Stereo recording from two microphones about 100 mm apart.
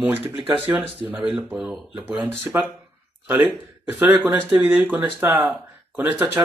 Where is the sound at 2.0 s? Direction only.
15° right (ahead or behind).